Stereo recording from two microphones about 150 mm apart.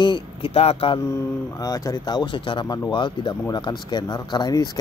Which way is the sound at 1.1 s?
25° left (ahead or behind).